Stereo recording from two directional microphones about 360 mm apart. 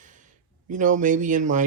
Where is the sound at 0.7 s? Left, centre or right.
Right.